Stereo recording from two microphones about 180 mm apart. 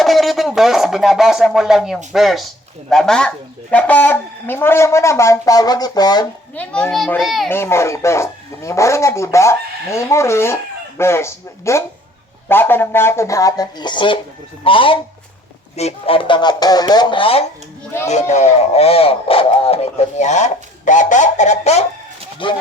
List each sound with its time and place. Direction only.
0.0 s a child's voice: centre (ahead or behind); by 6.2 s 20° left (ahead or behind)
6.6 s a child's voice: 5° left (ahead or behind)
7.5 s speech: 15° left (ahead or behind); by 21.8 s 35° left (ahead or behind)
22.4 s speech: 25° left (ahead or behind)